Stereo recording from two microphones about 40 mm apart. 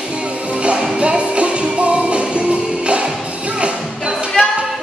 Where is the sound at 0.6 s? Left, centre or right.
Right.